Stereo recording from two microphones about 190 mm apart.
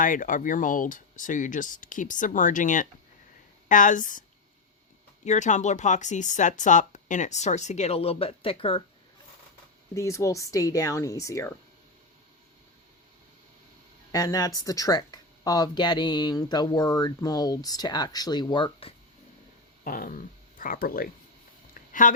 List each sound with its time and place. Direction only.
0.0 s speech: 45° left (ahead or behind)
5.2 s speech: 40° left (ahead or behind)
9.9 s speech: 15° left (ahead or behind)
14.1 s speech: 20° left (ahead or behind)
19.8 s speech: 45° left (ahead or behind)
21.8 s a sound: 45° left (ahead or behind)